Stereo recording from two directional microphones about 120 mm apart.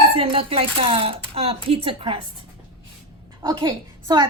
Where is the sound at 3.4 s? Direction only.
40° right (ahead or behind).